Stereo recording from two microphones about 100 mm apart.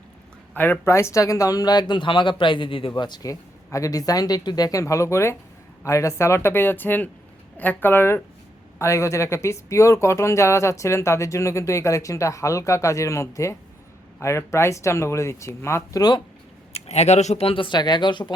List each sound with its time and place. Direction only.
0.5 s speech: 20° left (ahead or behind); by 3.3 s 45° left (ahead or behind)
3.7 s speech: 35° left (ahead or behind)
16.0 s speech: 45° left (ahead or behind)
16.7 s speech: 85° left; by 18.3 s 50° left (ahead or behind)